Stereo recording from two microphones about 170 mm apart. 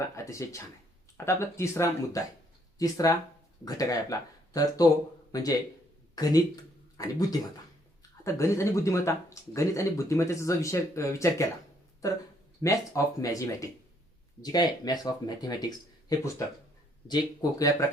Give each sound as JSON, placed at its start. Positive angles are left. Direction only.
{"t": 0.2, "sound": "speech", "side_deg": 15}
{"t": 12.6, "sound": "speech", "side_deg": 20}
{"t": 17.6, "sound": "speech", "side_deg": 20}